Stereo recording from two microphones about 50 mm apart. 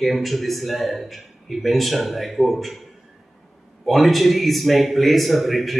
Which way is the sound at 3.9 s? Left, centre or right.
Centre.